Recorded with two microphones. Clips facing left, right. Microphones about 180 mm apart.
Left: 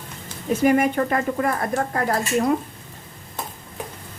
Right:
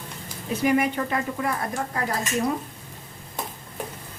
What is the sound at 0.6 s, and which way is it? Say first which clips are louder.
A woman's voice: left 4 dB; 50° left (ahead or behind).